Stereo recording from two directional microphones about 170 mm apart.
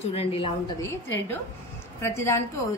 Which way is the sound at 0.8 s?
15° left (ahead or behind).